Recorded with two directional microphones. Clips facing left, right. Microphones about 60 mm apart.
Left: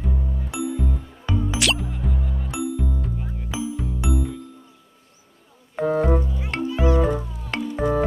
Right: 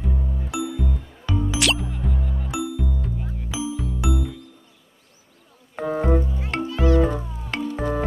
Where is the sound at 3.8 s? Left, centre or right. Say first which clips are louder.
Even; left.